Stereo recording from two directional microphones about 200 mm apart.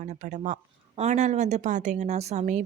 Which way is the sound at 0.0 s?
35° right (ahead or behind).